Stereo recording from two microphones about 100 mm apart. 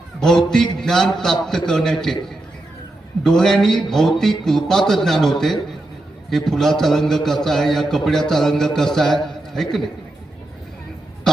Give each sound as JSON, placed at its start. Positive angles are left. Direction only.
{"t": 0.2, "sound": "a man's voice", "side_deg": 5}
{"t": 3.2, "sound": "a man's voice", "side_deg": 5}